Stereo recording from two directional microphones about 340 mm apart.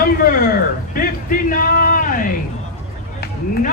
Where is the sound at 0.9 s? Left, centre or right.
Left.